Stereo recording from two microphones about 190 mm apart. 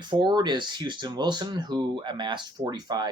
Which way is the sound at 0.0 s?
25° right (ahead or behind).